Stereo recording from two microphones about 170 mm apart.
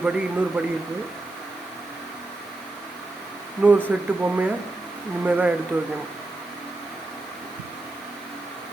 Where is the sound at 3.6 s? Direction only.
10° right (ahead or behind).